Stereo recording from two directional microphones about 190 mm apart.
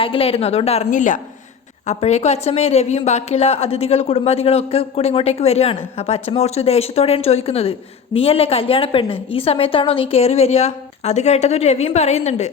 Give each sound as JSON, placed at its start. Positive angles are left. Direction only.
{"t": 0.0, "sound": "a woman's voice", "side_deg": 30}